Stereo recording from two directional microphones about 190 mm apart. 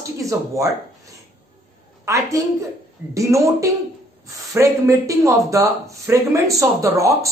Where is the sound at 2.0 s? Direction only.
15° right (ahead or behind).